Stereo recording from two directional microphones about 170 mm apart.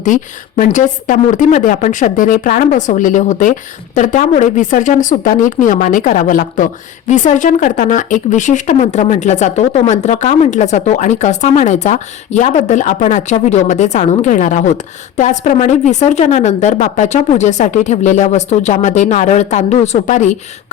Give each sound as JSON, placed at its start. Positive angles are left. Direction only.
{"t": 0.0, "sound": "speech", "side_deg": 45}